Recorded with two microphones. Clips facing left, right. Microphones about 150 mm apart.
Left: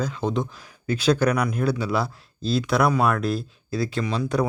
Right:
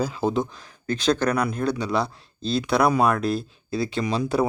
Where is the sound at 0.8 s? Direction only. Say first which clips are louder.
Left 1 dB; 10° left (ahead or behind).